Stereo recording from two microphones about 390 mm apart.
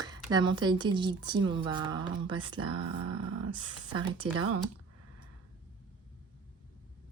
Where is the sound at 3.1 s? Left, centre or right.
Right.